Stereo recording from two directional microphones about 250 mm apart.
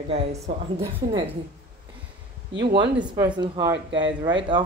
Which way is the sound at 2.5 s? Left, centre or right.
Right.